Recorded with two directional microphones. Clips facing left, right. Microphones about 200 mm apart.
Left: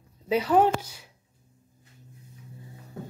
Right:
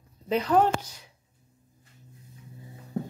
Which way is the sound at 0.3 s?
10° left (ahead or behind).